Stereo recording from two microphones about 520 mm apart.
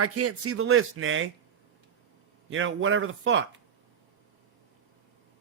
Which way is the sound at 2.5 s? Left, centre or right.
Right.